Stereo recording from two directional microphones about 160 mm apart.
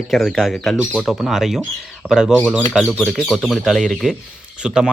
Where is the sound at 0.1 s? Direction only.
Centre (ahead or behind).